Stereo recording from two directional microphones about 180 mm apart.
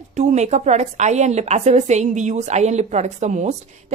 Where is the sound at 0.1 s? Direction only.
40° right (ahead or behind).